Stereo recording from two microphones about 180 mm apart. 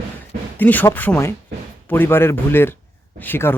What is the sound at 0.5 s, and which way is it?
Speech, 10° left (ahead or behind).